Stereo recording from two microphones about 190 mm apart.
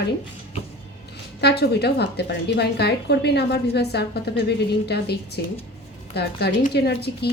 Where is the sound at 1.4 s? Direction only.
60° left (ahead or behind).